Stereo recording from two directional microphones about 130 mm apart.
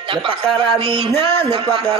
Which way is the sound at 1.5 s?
40° right (ahead or behind).